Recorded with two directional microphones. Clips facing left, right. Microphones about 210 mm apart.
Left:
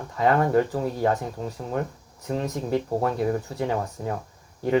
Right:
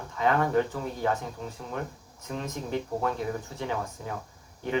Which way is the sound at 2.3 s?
35° left (ahead or behind).